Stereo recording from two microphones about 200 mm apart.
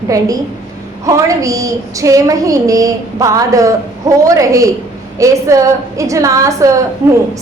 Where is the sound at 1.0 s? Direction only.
15° right (ahead or behind).